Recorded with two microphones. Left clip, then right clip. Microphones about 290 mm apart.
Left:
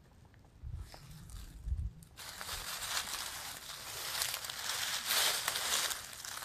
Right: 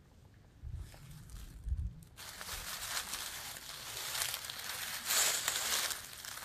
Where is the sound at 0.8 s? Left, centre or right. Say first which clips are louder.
Left 4 dB; centre.